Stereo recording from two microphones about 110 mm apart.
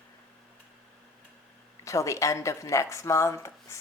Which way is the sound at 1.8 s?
30° left (ahead or behind).